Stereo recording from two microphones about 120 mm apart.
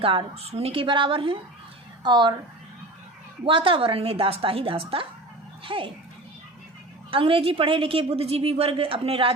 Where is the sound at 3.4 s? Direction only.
45° right (ahead or behind).